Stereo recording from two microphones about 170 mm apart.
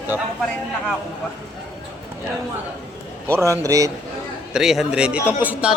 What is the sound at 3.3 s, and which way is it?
Speech, 20° right (ahead or behind).